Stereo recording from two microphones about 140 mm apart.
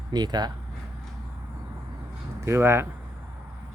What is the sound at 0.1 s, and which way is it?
Speech, 30° right (ahead or behind).